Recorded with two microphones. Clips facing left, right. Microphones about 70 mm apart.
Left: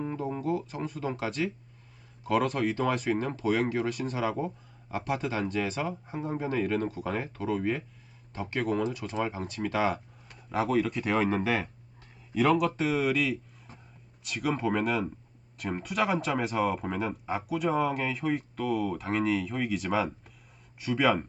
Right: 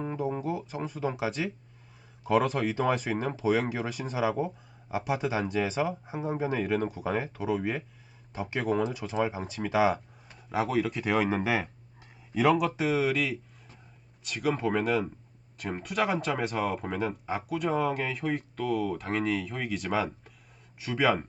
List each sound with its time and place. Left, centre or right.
0.0 s music: centre
0.4 s speech: centre
8.6 s speech: centre